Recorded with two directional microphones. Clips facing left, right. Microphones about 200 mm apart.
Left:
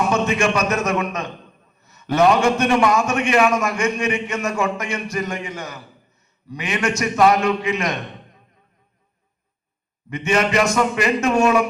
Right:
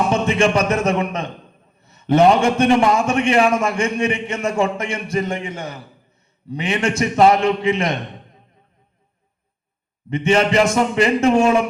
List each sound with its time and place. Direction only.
0.1 s a man's voice: 30° right (ahead or behind)
10.1 s a man's voice: 30° right (ahead or behind)